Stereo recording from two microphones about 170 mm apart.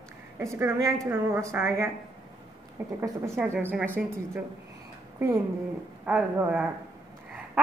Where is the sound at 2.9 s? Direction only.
15° right (ahead or behind).